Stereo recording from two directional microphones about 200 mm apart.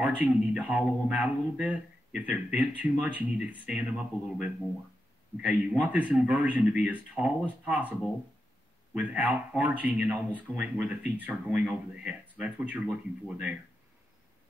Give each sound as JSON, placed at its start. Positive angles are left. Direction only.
{"t": 0.0, "sound": "speech", "side_deg": -5}
{"t": 8.9, "sound": "speech", "side_deg": -5}